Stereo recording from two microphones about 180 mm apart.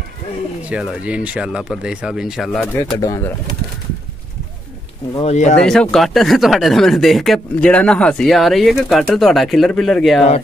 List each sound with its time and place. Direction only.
0.7 s speech: 5° right (ahead or behind)
3.0 s speech: 15° left (ahead or behind)
5.2 s speech: 40° left (ahead or behind)
5.6 s speech: 5° left (ahead or behind)